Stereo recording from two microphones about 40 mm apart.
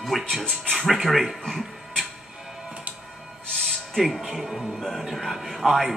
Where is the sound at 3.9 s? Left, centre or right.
Centre.